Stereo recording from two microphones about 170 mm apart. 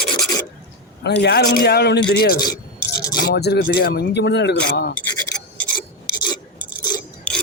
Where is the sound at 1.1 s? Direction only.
75° left (ahead or behind).